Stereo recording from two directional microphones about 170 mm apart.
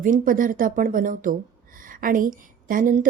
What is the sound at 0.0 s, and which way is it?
A woman's voice, 50° right (ahead or behind).